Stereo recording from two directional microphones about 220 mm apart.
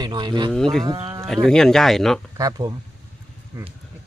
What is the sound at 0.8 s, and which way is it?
Speech, 20° right (ahead or behind).